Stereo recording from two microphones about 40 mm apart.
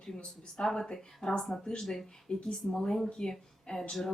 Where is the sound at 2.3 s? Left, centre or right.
Left.